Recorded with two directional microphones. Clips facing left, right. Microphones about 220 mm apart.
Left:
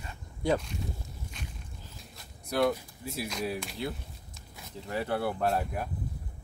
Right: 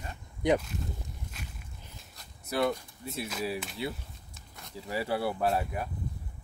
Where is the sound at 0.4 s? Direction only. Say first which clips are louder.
Right 2 dB; 20° right (ahead or behind).